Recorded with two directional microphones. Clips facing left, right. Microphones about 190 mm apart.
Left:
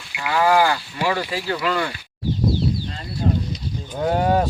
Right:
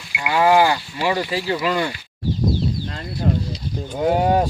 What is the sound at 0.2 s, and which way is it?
Speech, 20° right (ahead or behind).